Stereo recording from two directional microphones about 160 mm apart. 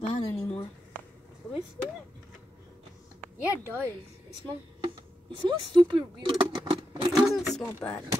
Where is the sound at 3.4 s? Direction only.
10° right (ahead or behind).